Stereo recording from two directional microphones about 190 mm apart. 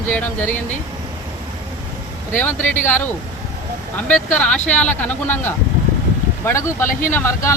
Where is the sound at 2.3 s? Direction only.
10° left (ahead or behind).